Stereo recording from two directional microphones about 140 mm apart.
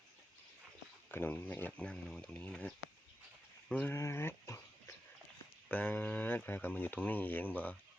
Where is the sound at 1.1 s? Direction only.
15° left (ahead or behind).